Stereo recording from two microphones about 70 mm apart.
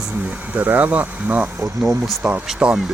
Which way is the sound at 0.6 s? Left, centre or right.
Right.